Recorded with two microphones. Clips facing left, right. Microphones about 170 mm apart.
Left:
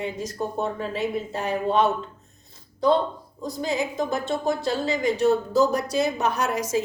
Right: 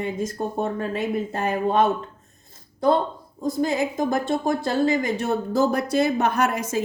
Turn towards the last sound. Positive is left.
turn(degrees=-55)  # may be behind; listen again after turning